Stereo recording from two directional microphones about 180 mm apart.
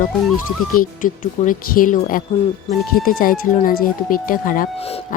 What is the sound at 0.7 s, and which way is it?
Speech, 50° left (ahead or behind).